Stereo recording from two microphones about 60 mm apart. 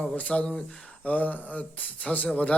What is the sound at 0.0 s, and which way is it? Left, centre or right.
Speech, left.